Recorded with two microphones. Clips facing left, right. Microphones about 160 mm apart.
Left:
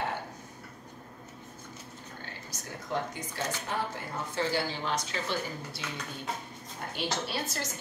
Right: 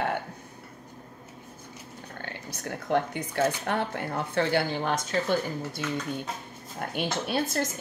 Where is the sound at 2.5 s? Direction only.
60° right (ahead or behind).